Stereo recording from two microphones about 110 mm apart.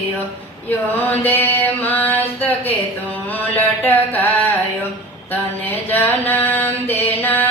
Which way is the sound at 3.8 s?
15° left (ahead or behind).